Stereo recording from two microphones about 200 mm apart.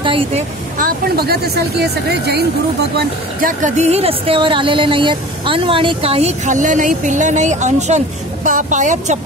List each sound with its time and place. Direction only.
0.0 s a sound: 25° right (ahead or behind)
0.7 s speech: 45° right (ahead or behind)
3.3 s speech: 40° right (ahead or behind)